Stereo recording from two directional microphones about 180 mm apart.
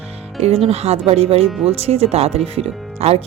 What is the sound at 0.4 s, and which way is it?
Speech, 35° right (ahead or behind).